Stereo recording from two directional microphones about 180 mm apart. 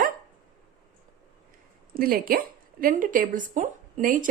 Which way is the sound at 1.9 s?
55° right (ahead or behind).